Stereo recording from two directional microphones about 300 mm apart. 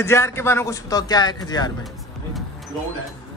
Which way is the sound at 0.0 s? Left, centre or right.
Centre.